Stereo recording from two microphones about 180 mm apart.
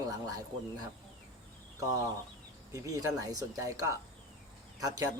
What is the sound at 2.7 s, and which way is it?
A man's voice, 20° right (ahead or behind).